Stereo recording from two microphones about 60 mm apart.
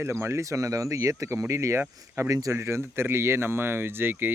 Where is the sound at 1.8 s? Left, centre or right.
Right.